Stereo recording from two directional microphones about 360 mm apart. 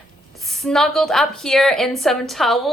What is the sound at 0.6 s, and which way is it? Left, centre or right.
A woman's voice, centre.